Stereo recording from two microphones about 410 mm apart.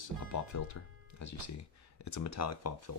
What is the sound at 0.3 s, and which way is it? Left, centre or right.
Speech, left.